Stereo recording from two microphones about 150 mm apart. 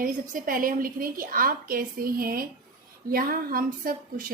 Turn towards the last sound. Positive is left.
turn(degrees=-70)  # may be behind; listen again after turning